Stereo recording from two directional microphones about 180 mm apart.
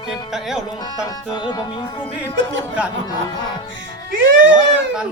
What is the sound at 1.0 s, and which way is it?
Music, 20° left (ahead or behind).